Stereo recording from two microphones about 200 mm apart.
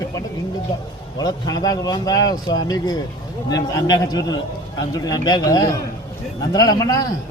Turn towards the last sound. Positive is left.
turn(degrees=15)  # may be behind; listen again after turning